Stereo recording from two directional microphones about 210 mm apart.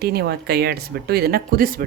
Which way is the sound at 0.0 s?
50° right (ahead or behind).